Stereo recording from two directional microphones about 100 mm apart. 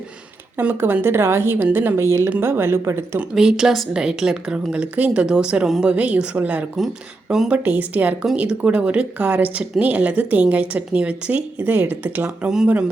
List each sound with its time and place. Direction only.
0.6 s a woman's voice: 20° right (ahead or behind)
3.2 s speech: 5° right (ahead or behind)
6.7 s speech: centre (ahead or behind); by 12.5 s 20° right (ahead or behind)